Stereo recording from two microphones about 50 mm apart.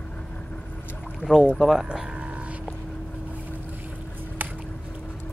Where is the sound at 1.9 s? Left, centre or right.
Right.